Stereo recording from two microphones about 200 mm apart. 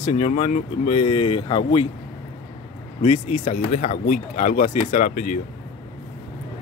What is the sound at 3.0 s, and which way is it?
Speech, 35° left (ahead or behind).